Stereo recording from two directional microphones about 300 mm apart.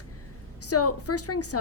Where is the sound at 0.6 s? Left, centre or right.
Left.